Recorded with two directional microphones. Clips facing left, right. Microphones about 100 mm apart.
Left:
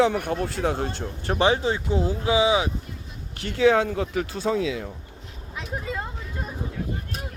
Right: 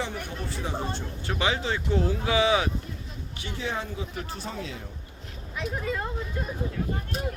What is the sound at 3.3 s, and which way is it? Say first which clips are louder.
Speech: left 13 dB; 75° left (ahead or behind).